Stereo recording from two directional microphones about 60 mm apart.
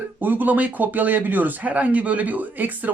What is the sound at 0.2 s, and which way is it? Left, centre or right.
Speech, right.